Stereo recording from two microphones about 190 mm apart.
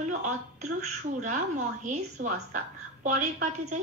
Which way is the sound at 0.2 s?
40° right (ahead or behind).